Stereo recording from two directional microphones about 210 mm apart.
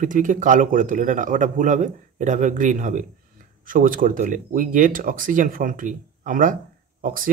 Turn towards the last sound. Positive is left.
turn(degrees=-40)  # may be behind; listen again after turning